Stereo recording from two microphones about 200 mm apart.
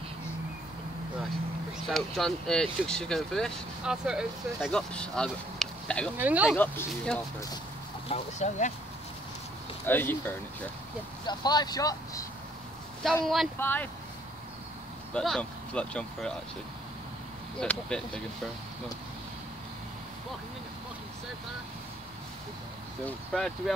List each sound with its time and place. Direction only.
1.9 s speech: centre (ahead or behind)
6.1 s speech: 10° right (ahead or behind)
6.5 s speech: 10° left (ahead or behind)
8.1 s speech: 35° left (ahead or behind)
9.8 s speech: 10° left (ahead or behind)
13.0 s speech: centre (ahead or behind)
15.1 s speech: 5° left (ahead or behind)
17.6 s speech: 5° left (ahead or behind)
23.0 s speech: 5° left (ahead or behind)